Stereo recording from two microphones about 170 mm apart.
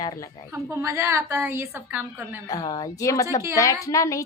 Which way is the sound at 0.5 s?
15° right (ahead or behind).